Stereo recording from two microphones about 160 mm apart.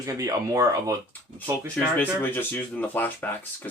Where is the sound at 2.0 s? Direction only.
10° left (ahead or behind).